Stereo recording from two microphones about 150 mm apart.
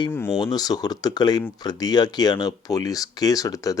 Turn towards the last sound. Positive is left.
turn(degrees=25)  # may be behind; listen again after turning